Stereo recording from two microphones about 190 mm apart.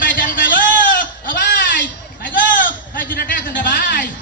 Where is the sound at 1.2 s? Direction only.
50° left (ahead or behind).